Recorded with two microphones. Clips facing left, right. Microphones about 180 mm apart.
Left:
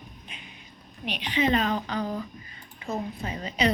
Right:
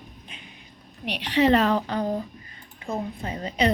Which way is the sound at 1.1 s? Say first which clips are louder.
Right 5 dB; 70° right (ahead or behind).